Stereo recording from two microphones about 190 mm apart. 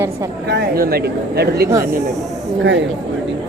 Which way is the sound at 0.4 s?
60° right (ahead or behind).